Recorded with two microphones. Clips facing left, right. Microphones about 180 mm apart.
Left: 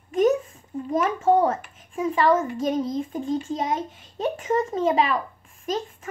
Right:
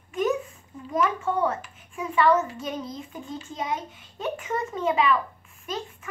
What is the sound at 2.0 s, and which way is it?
Speech, 35° left (ahead or behind).